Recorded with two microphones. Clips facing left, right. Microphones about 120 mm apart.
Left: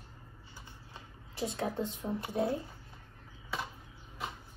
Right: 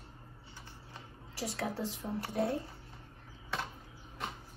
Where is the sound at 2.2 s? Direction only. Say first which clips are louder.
Even; 15° left (ahead or behind).